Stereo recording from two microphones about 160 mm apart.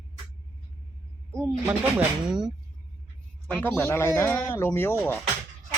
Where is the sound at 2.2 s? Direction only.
5° right (ahead or behind).